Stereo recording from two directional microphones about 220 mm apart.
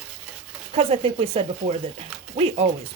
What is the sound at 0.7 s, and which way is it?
Speech, 25° right (ahead or behind).